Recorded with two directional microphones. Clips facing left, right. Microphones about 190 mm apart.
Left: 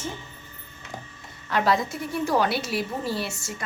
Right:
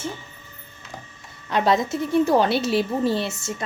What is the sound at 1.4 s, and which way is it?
A woman's voice, 20° right (ahead or behind).